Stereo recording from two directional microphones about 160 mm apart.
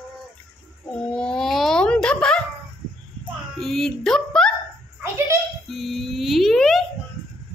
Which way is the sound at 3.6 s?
Centre (ahead or behind).